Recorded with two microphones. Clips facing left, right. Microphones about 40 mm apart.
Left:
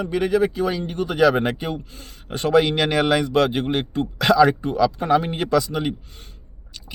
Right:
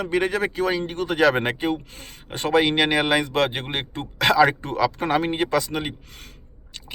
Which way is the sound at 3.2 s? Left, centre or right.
Right.